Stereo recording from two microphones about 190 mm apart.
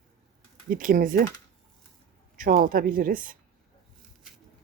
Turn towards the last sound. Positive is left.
turn(degrees=-45)  # may be behind; listen again after turning